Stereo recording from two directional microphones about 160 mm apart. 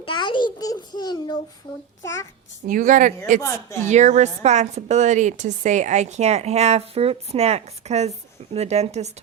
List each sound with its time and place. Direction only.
0.0 s a child's voice: 30° left (ahead or behind)
2.6 s a woman's voice: 55° right (ahead or behind)